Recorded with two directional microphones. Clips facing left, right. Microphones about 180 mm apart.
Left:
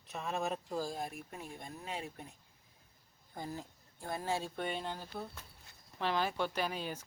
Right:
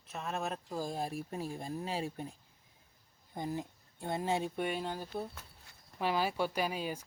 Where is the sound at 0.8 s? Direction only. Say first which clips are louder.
Right 2 dB; 25° right (ahead or behind).